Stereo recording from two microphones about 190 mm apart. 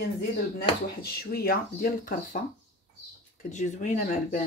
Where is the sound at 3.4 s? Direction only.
40° left (ahead or behind).